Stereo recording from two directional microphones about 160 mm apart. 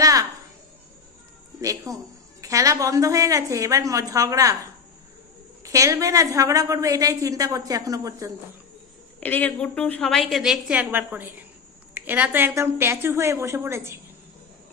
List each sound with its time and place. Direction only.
0.0 s a sound: 20° right (ahead or behind)
1.6 s a woman's voice: 20° right (ahead or behind)
5.6 s a woman's voice: 20° right (ahead or behind)
9.2 s a woman's voice: 10° left (ahead or behind); by 13.9 s 15° right (ahead or behind)